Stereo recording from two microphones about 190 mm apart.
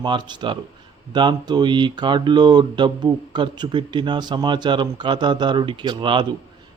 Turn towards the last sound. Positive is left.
turn(degrees=-25)  # may be behind; listen again after turning